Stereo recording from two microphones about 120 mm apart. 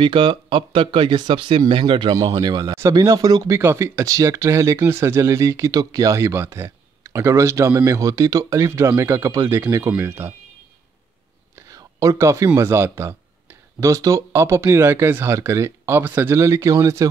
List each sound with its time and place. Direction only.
0.0 s speech: 45° right (ahead or behind); by 10.3 s 20° right (ahead or behind)
11.7 s whispering: 30° right (ahead or behind)
12.5 s speech: 20° right (ahead or behind)